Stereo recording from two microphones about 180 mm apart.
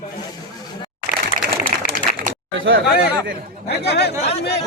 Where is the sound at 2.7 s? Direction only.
90° right.